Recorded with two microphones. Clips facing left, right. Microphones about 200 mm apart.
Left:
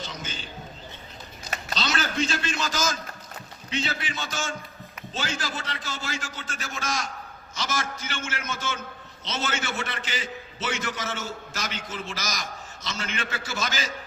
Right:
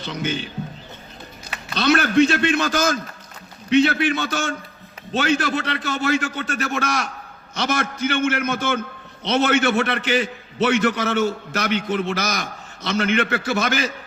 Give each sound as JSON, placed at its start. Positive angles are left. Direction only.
{"t": 0.0, "sound": "a man's voice", "side_deg": -65}
{"t": 1.7, "sound": "a man's voice", "side_deg": -60}